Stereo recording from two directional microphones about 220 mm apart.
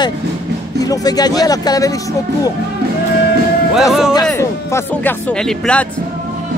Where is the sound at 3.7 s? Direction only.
Centre (ahead or behind).